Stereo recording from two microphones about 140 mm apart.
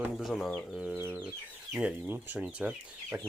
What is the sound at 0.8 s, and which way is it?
Speech, 10° right (ahead or behind).